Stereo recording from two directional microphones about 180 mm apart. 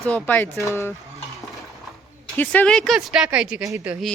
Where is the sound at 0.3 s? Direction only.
10° left (ahead or behind).